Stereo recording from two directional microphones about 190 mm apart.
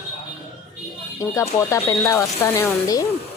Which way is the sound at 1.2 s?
15° left (ahead or behind).